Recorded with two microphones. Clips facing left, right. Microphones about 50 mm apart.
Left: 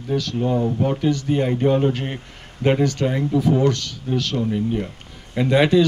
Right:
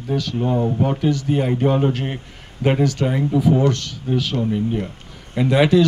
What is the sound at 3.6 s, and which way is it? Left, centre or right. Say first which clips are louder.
Speech: even; right.